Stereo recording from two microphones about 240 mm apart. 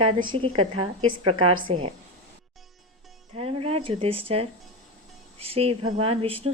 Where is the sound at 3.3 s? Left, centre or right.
Right.